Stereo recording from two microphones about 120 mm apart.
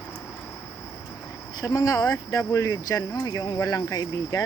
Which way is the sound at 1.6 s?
30° left (ahead or behind).